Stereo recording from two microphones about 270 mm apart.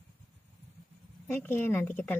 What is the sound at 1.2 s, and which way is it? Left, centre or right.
Speech, centre.